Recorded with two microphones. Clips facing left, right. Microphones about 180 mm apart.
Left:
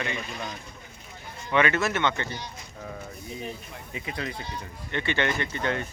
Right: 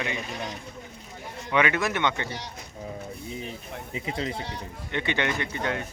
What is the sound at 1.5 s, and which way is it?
Speech, 15° right (ahead or behind).